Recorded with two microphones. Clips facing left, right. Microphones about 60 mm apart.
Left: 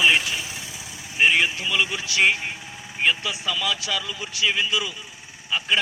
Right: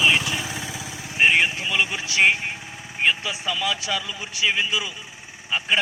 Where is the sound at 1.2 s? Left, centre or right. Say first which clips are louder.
Right 1 dB; centre.